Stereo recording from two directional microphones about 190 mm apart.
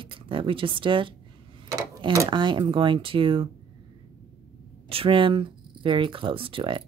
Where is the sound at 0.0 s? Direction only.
25° right (ahead or behind).